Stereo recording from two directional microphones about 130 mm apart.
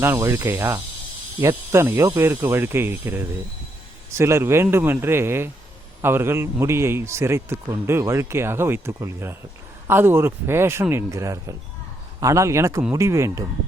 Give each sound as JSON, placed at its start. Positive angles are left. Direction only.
{"t": 0.0, "sound": "a man's voice", "side_deg": -20}